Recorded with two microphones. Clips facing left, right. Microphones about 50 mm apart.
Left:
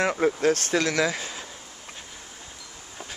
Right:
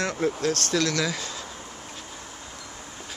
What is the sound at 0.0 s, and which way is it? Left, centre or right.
Speech, centre.